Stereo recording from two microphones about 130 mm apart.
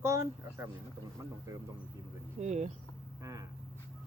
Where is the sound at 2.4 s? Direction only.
60° right (ahead or behind).